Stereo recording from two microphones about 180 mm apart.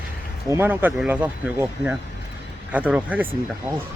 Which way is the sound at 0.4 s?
15° right (ahead or behind).